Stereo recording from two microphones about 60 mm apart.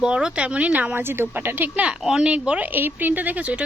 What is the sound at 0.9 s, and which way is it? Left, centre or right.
Speech, right.